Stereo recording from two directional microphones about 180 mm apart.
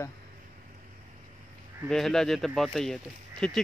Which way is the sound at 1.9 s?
Centre (ahead or behind).